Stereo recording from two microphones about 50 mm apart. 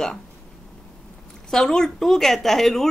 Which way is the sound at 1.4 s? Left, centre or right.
Centre.